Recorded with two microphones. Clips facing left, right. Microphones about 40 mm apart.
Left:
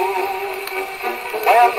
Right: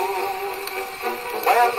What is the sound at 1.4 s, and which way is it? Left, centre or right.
Radio, left.